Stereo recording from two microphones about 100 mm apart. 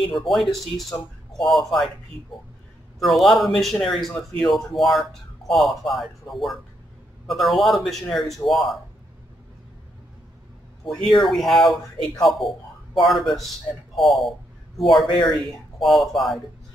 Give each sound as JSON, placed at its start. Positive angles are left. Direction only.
{"t": 0.1, "sound": "a man's voice", "side_deg": 0}
{"t": 3.0, "sound": "a man's voice", "side_deg": 0}
{"t": 10.9, "sound": "a man's voice", "side_deg": 0}
{"t": 15.0, "sound": "speech", "side_deg": 50}
{"t": 15.8, "sound": "a man's voice", "side_deg": 0}